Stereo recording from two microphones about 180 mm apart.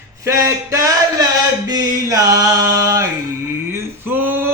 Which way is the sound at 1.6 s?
20° right (ahead or behind).